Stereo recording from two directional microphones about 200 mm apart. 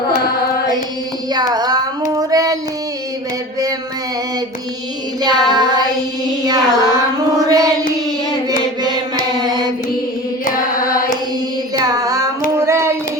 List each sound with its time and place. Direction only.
1.3 s child singing: 20° right (ahead or behind)
5.2 s child singing: 20° right (ahead or behind)
9.4 s carnatic music: 20° right (ahead or behind)
11.9 s child singing: 15° right (ahead or behind)